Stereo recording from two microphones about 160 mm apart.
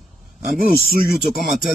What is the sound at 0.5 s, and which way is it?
Speech, 65° left (ahead or behind).